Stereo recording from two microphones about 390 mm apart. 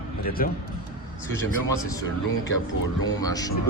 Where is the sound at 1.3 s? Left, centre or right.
Centre.